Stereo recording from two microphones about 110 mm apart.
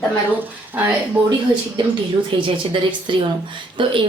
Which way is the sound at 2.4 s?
50° right (ahead or behind).